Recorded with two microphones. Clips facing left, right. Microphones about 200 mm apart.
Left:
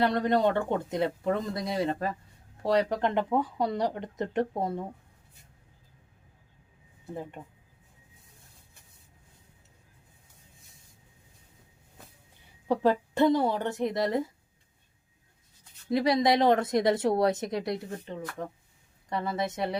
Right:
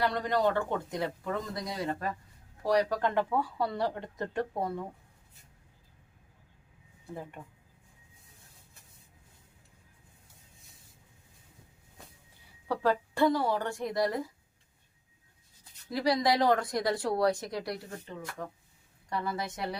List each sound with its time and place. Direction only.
0.0 s a woman's voice: 20° left (ahead or behind)
7.4 s a woman's voice: 25° left (ahead or behind)
12.6 s a woman's voice: 20° left (ahead or behind)
15.9 s a woman's voice: 20° left (ahead or behind)